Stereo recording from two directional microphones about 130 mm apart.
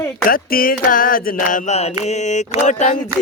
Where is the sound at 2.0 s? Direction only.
65° left (ahead or behind).